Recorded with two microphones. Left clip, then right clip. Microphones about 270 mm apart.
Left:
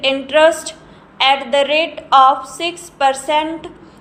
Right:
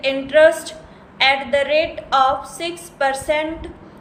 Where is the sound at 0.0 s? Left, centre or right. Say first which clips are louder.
Left 1 dB; centre.